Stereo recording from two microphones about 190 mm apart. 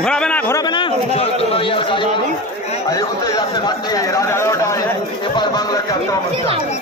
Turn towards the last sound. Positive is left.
turn(degrees=20)  # may be behind; listen again after turning